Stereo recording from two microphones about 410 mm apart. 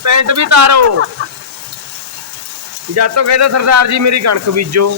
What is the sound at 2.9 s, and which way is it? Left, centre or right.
Speech, right.